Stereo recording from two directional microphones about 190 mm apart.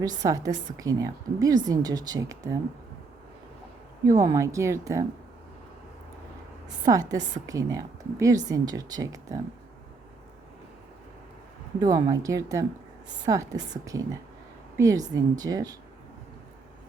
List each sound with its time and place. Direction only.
0.2 s a woman's voice: 20° right (ahead or behind)
4.0 s a woman's voice: 20° right (ahead or behind)
6.8 s a woman's voice: 20° right (ahead or behind)
11.8 s a woman's voice: 20° right (ahead or behind)